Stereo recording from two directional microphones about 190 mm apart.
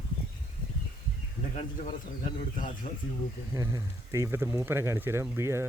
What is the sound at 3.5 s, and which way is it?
Speech, 15° right (ahead or behind).